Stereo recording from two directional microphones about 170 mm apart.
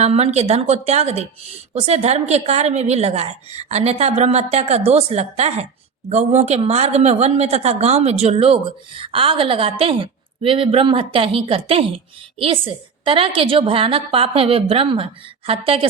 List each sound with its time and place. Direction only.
0.0 s a woman's voice: 40° right (ahead or behind)